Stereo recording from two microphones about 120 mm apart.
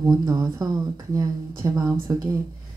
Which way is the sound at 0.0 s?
25° right (ahead or behind).